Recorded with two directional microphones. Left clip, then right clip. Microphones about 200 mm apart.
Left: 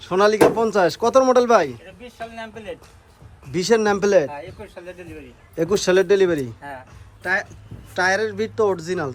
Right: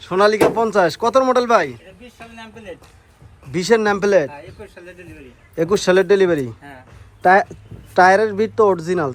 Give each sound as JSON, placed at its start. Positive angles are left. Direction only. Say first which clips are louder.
{"t": 0.0, "sound": "speech", "louder": "right 1 dB", "side_deg": 10}
{"t": 2.0, "sound": "speech", "louder": "left 6 dB", "side_deg": 0}
{"t": 4.7, "sound": "speech", "louder": "left 2 dB", "side_deg": 50}
{"t": 5.5, "sound": "speech", "louder": "right 3 dB", "side_deg": 5}
{"t": 7.2, "sound": "speech", "louder": "right 10 dB", "side_deg": -10}